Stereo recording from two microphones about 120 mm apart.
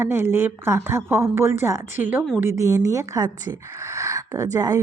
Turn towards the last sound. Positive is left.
turn(degrees=-30)  # may be behind; listen again after turning